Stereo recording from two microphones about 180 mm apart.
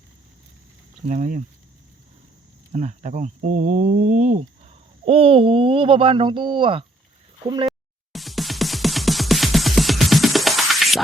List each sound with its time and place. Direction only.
1.0 s speech: 40° right (ahead or behind)
2.7 s speech: 40° right (ahead or behind); by 7.7 s 25° right (ahead or behind)
7.7 s music: centre (ahead or behind)